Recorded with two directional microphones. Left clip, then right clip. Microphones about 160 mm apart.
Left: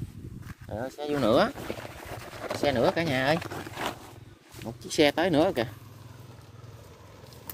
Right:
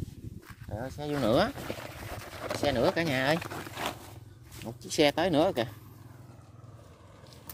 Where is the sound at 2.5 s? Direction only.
25° right (ahead or behind).